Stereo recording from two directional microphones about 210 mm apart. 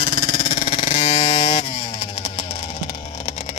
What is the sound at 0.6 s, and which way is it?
Vehicle, 25° left (ahead or behind).